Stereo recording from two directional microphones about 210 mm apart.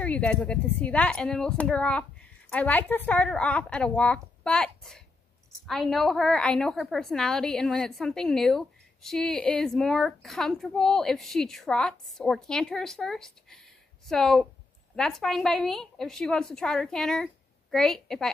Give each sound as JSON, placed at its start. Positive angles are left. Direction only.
{"t": 0.0, "sound": "a woman's voice", "side_deg": 5}